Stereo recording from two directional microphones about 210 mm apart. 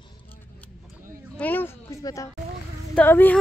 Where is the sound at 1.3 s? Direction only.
10° left (ahead or behind).